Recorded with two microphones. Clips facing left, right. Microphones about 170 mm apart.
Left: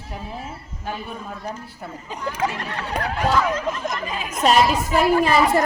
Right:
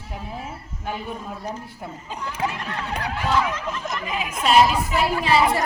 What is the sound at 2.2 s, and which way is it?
A woman's voice, 35° left (ahead or behind).